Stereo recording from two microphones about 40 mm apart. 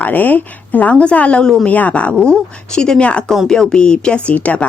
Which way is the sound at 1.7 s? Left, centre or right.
Left.